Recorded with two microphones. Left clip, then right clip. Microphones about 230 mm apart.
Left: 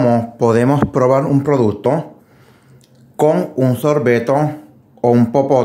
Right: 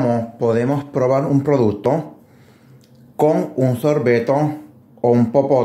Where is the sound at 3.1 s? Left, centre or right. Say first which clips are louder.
Left 2 dB; centre.